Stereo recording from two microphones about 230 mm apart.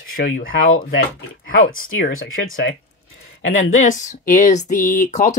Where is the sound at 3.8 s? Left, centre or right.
Left.